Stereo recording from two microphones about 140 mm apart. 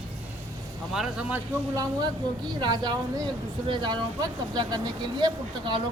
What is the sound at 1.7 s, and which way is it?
A woman's voice, 25° right (ahead or behind).